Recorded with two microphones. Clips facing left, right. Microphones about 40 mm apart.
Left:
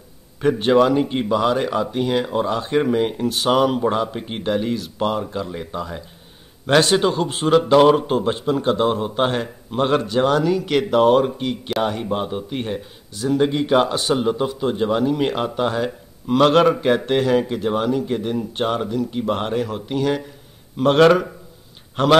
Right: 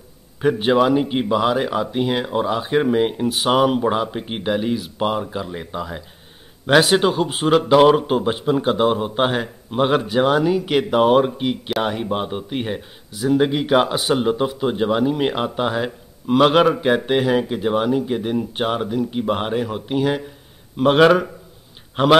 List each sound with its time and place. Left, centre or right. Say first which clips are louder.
0.4 s speech: left 1 dB; centre